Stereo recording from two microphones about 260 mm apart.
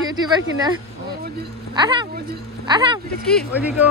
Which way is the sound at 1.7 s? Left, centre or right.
Centre.